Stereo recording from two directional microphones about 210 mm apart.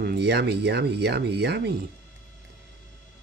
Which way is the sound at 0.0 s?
50° right (ahead or behind).